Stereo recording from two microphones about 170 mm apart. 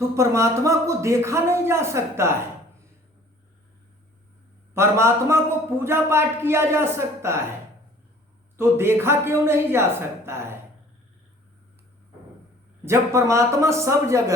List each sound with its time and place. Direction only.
0.2 s a man's voice: 15° right (ahead or behind)
4.7 s a man's voice: 15° right (ahead or behind)
8.5 s a man's voice: 15° right (ahead or behind)
12.8 s a man's voice: 15° right (ahead or behind)